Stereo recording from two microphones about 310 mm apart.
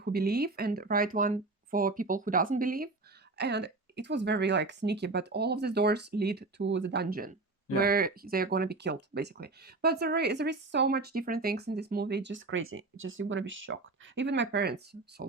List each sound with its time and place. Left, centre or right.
0.0 s speech: right